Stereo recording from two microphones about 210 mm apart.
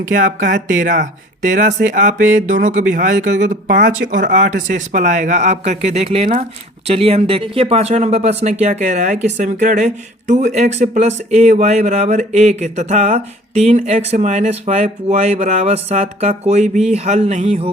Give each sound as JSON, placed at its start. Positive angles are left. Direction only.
{"t": 0.0, "sound": "speech", "side_deg": -40}